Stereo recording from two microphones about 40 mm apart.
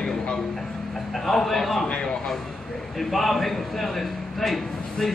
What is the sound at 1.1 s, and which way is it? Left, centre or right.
Speech, centre.